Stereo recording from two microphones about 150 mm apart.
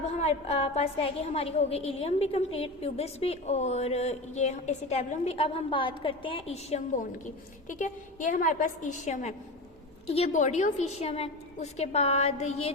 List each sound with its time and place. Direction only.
0.2 s a woman's voice: 45° left (ahead or behind)
7.7 s a woman's voice: 60° left (ahead or behind)